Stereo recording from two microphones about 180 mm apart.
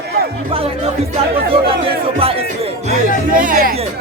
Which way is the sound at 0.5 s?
30° right (ahead or behind).